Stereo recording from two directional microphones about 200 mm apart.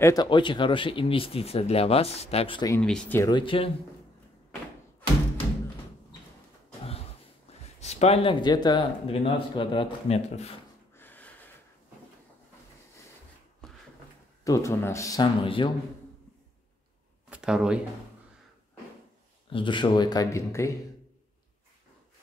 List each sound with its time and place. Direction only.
0.0 s speech: 20° left (ahead or behind)
2.8 s speech: 5° left (ahead or behind)
3.2 s speech: 20° left (ahead or behind)
7.5 s a sound: 30° left (ahead or behind)
7.8 s speech: 30° left (ahead or behind)
11.0 s a sound: 10° left (ahead or behind)
14.4 s speech: 15° left (ahead or behind)
17.3 s speech: 5° right (ahead or behind)
19.5 s speech: 25° left (ahead or behind)